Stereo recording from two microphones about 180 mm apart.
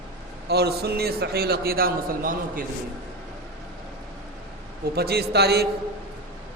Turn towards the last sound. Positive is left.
turn(degrees=-65)  # may be behind; listen again after turning